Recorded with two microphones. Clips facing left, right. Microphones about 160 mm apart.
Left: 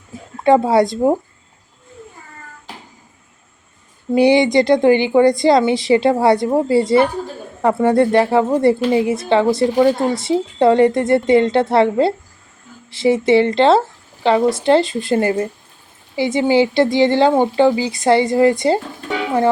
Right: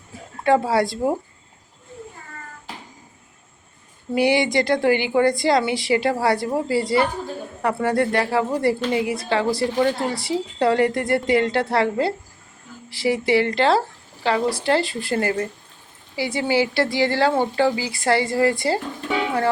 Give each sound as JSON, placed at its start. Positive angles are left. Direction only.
{"t": 0.4, "sound": "a woman's voice", "side_deg": 20}
{"t": 4.1, "sound": "a woman's voice", "side_deg": 20}